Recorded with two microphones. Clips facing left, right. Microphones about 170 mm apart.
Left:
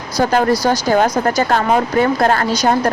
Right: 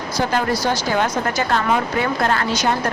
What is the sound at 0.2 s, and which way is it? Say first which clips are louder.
Speech: left 6 dB; 40° left (ahead or behind).